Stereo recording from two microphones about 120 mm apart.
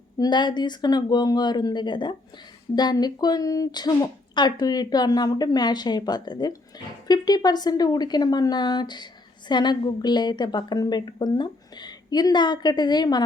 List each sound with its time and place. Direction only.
0.2 s a woman's voice: 40° left (ahead or behind)